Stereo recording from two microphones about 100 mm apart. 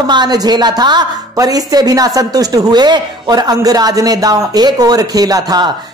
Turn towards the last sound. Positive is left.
turn(degrees=-40)  # may be behind; listen again after turning